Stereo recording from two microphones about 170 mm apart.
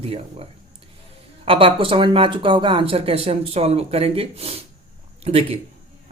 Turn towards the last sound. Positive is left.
turn(degrees=-35)  # may be behind; listen again after turning